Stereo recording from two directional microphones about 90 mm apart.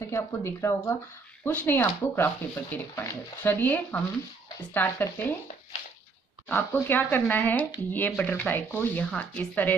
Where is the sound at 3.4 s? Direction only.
20° left (ahead or behind).